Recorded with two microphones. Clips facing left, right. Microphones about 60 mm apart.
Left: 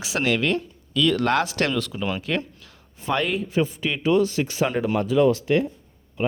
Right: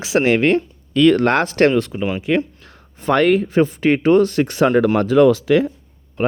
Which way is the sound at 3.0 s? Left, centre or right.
Right.